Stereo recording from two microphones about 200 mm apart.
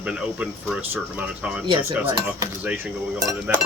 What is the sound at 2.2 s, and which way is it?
Speech, 10° right (ahead or behind).